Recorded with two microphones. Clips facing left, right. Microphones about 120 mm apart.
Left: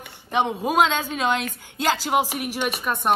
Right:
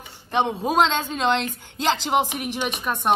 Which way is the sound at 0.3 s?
10° left (ahead or behind).